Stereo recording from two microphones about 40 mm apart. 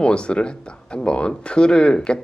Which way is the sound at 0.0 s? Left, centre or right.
Left.